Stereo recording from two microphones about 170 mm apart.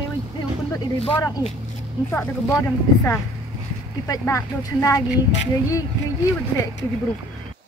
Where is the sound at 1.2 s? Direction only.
20° left (ahead or behind).